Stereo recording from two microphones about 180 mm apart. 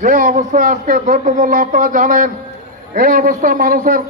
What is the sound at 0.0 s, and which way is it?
A man's voice, 50° right (ahead or behind).